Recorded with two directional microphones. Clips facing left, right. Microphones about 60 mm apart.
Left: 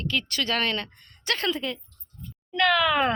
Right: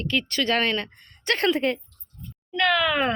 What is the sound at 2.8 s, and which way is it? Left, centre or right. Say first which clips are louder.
Speech: left 1 dB; centre.